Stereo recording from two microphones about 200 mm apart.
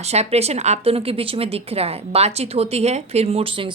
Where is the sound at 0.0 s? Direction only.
30° right (ahead or behind).